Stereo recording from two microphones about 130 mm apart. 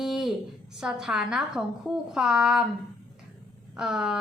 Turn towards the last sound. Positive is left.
turn(degrees=-5)  # may be behind; listen again after turning